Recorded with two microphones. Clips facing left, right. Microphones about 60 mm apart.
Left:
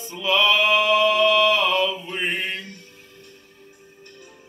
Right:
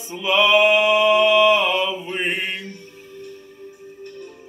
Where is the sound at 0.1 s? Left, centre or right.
Centre.